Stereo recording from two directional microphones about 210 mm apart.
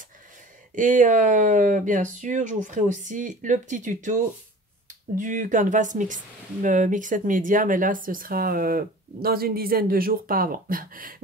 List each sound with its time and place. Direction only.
0.7 s speech: 40° right (ahead or behind)